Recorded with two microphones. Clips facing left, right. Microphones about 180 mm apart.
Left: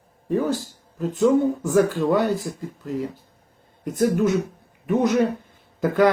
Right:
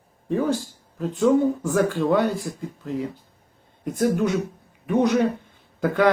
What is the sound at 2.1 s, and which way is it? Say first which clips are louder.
Speech: left 1 dB; 45° left (ahead or behind).